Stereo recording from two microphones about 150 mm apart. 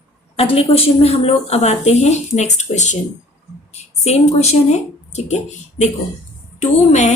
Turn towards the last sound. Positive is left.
turn(degrees=50)  # may be behind; listen again after turning